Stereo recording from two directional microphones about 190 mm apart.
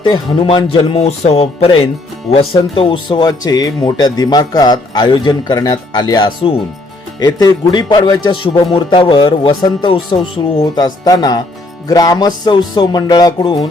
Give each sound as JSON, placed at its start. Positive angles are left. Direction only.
{"t": 0.0, "sound": "speech", "side_deg": 25}